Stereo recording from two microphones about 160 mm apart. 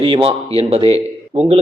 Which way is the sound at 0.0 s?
35° right (ahead or behind).